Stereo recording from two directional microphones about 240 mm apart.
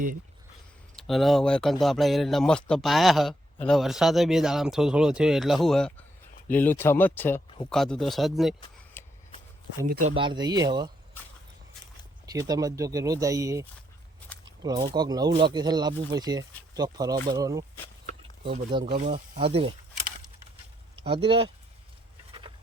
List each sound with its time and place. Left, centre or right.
0.9 s speech: centre
9.8 s speech: right
10.2 s speech: centre
12.2 s speech: centre
14.4 s a sound: centre
14.9 s speech: centre
18.0 s a sound: right
18.9 s speech: right